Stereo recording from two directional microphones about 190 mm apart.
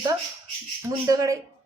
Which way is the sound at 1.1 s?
20° right (ahead or behind).